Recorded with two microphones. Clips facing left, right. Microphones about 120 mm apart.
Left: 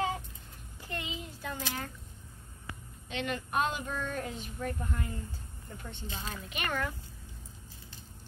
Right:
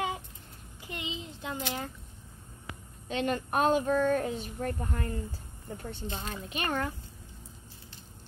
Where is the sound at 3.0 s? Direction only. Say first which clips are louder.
Right 5 dB; 40° right (ahead or behind).